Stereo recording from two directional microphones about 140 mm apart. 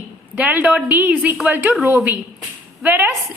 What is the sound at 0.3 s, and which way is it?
A woman's voice, 10° right (ahead or behind).